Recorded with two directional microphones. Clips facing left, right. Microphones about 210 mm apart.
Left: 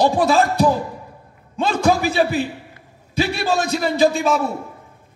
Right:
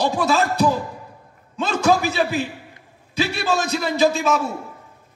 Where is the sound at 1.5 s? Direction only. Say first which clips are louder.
Left 1 dB; 55° left (ahead or behind).